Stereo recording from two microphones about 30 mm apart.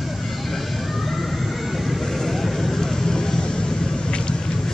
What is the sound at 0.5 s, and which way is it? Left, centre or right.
Vehicle, centre.